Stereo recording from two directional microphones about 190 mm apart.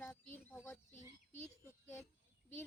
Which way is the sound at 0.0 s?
10° left (ahead or behind).